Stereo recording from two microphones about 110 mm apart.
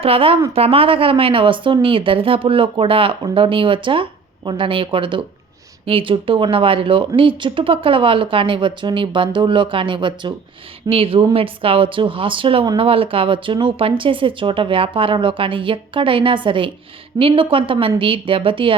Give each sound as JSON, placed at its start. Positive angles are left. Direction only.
{"t": 0.0, "sound": "speech", "side_deg": -60}
{"t": 10.8, "sound": "speech", "side_deg": -60}